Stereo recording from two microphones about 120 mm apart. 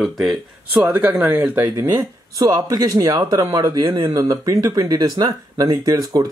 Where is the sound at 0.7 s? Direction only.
15° right (ahead or behind).